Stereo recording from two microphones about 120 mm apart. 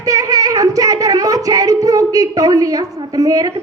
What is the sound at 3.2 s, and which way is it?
Speech, 30° right (ahead or behind).